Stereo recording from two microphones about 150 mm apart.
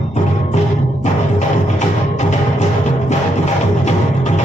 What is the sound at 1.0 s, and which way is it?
Music, 50° left (ahead or behind).